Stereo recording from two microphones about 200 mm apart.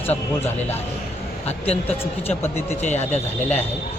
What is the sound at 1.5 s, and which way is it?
Speech, 30° left (ahead or behind).